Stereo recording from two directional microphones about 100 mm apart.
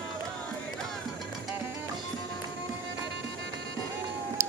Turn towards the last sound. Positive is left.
turn(degrees=-30)  # may be behind; listen again after turning